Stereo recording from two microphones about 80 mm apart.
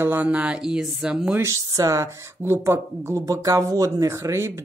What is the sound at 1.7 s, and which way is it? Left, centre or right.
Speech, right.